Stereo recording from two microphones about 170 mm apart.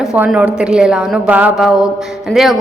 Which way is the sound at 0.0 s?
Centre (ahead or behind).